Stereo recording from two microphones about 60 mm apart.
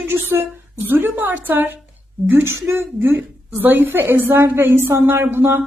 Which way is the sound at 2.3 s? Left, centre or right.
Right.